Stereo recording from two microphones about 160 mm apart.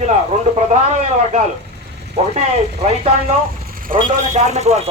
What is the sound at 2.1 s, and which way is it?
A man's voice, 45° right (ahead or behind).